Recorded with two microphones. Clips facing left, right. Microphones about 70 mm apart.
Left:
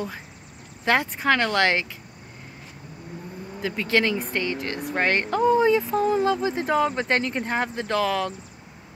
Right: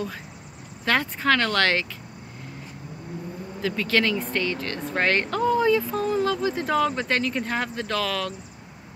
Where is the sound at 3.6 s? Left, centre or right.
Left.